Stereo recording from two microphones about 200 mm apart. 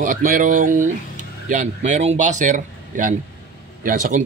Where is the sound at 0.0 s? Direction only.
45° right (ahead or behind).